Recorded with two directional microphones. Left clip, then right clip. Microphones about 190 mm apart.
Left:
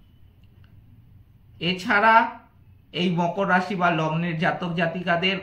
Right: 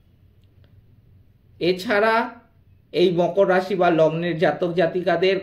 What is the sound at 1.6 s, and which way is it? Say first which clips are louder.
A man's voice: right 1 dB; 40° right (ahead or behind).